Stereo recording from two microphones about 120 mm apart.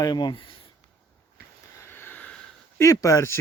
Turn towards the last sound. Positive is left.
turn(degrees=25)  # may be behind; listen again after turning